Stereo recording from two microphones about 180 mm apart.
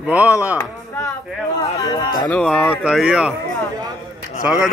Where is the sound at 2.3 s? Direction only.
Centre (ahead or behind).